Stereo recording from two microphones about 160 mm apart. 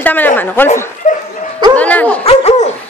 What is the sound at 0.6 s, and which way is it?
Speech, 15° left (ahead or behind).